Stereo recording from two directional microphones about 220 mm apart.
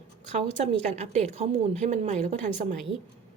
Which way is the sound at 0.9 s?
30° right (ahead or behind).